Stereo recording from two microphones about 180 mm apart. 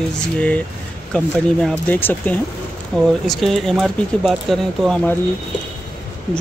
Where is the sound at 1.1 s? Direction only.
5° left (ahead or behind).